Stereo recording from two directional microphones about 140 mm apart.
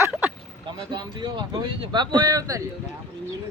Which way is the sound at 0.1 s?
10° right (ahead or behind).